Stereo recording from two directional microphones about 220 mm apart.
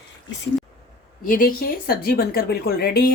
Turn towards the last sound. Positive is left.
turn(degrees=45)  # may be behind; listen again after turning